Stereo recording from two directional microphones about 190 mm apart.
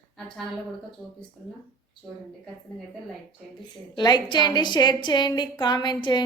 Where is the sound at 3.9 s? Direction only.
25° left (ahead or behind).